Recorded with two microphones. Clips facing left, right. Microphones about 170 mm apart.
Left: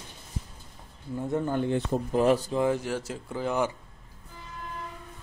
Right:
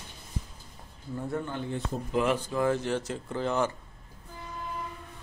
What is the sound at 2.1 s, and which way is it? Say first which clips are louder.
Speech: left 4 dB; 40° left (ahead or behind).